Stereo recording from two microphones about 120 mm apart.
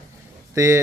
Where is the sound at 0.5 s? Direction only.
25° right (ahead or behind).